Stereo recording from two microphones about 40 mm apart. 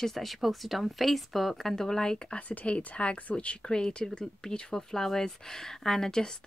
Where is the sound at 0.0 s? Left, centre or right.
Centre; by 2.4 s left.